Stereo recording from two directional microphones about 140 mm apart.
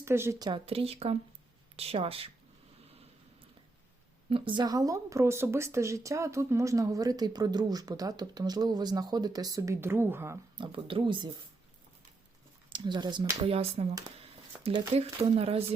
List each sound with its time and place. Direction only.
0.0 s speech: 20° right (ahead or behind); by 2.3 s 45° right (ahead or behind)
4.3 s speech: 35° right (ahead or behind); by 10.3 s 15° right (ahead or behind)
10.6 s speech: 40° right (ahead or behind)
12.7 s speech: 30° right (ahead or behind)
13.5 s speech: 45° right (ahead or behind)
14.9 s speech: 45° right (ahead or behind)